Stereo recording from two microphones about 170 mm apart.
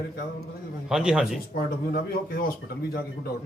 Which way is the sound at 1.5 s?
60° left (ahead or behind).